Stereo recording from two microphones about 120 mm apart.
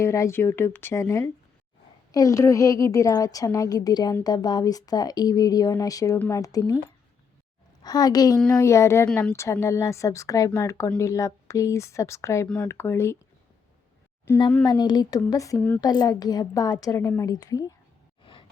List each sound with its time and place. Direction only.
0.0 s a woman's voice: 25° left (ahead or behind)
7.8 s a woman's voice: 35° left (ahead or behind)
9.0 s speech: 10° left (ahead or behind)
9.3 s a woman's voice: 25° left (ahead or behind)
14.6 s a woman's voice: 35° left (ahead or behind)
18.2 s a sound: 45° left (ahead or behind)